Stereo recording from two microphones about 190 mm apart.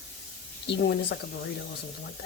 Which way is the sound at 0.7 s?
65° left (ahead or behind).